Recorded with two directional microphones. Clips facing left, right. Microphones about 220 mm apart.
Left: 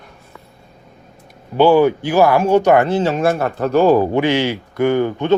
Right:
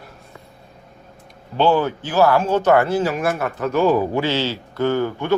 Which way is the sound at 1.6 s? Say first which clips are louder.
Left 6 dB; 10° left (ahead or behind).